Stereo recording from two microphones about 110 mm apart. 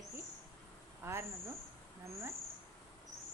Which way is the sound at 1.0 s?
25° right (ahead or behind).